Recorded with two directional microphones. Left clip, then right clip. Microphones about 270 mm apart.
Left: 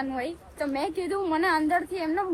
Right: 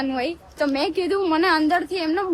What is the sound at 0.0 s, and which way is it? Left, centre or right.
A woman's voice, centre.